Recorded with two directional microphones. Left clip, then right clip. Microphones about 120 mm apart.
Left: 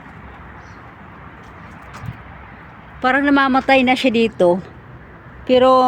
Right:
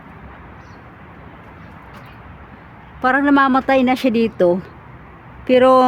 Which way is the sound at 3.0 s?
15° right (ahead or behind).